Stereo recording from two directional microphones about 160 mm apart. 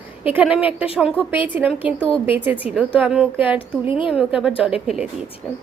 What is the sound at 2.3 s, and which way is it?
A woman's voice, 10° right (ahead or behind).